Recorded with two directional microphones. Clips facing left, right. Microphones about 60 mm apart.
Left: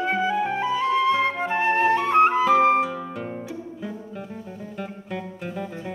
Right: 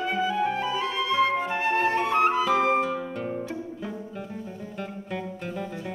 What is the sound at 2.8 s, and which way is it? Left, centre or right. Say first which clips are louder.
Music: left 2 dB; centre.